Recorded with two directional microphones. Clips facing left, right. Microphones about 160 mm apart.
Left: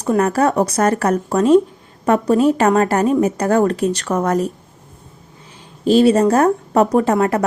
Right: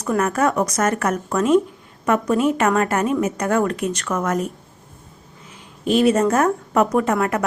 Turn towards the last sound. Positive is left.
turn(degrees=35)  # may be behind; listen again after turning